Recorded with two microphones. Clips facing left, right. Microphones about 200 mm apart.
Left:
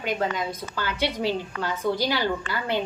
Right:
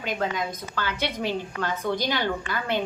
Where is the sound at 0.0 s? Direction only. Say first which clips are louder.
Left 1 dB; 10° left (ahead or behind).